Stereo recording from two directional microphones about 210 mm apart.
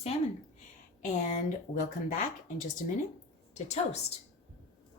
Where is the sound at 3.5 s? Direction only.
30° left (ahead or behind).